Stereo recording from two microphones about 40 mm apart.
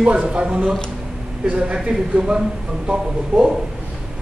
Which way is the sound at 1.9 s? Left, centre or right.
Centre.